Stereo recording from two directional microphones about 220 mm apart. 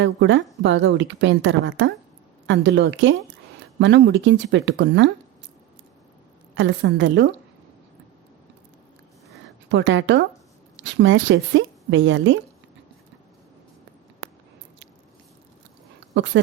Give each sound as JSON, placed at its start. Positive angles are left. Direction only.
{"t": 0.0, "sound": "a woman's voice", "side_deg": -55}
{"t": 6.5, "sound": "speech", "side_deg": -60}
{"t": 9.6, "sound": "a woman's voice", "side_deg": -55}
{"t": 14.2, "sound": "biting", "side_deg": -60}
{"t": 16.1, "sound": "a woman's voice", "side_deg": -55}